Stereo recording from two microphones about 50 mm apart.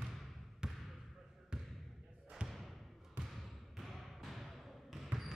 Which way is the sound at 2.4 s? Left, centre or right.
Centre.